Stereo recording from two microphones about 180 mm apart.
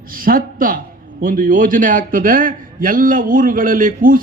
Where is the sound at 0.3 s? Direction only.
50° right (ahead or behind).